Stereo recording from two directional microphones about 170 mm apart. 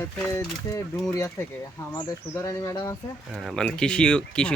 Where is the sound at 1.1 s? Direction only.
15° left (ahead or behind).